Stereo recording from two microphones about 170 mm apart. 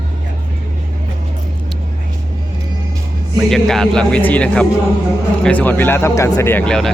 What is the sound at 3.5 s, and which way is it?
Speech, 5° left (ahead or behind).